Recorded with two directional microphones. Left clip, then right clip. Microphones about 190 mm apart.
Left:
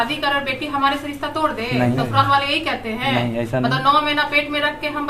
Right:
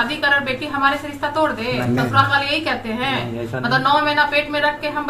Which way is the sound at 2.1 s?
20° left (ahead or behind).